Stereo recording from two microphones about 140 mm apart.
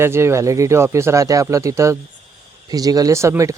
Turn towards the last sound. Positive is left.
turn(degrees=-20)  # may be behind; listen again after turning